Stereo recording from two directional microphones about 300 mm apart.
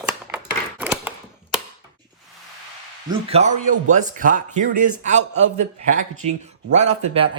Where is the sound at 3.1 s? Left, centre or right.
Centre.